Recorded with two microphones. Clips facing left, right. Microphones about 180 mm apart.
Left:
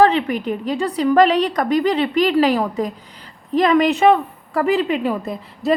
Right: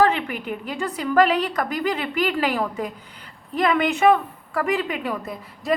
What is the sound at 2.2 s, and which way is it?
A woman's voice, 35° left (ahead or behind).